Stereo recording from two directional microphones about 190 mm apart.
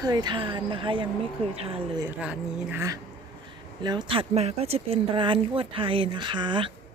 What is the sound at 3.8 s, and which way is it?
Speech, 20° right (ahead or behind).